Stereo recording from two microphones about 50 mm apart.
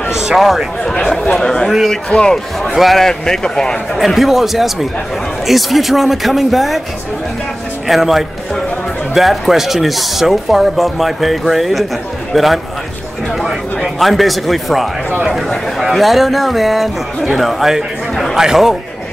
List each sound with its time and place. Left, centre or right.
0.8 s a man's voice: centre
2.7 s speech: centre
3.0 s a man's voice: centre
4.0 s speech: centre
7.9 s speech: centre
15.9 s a man's voice: centre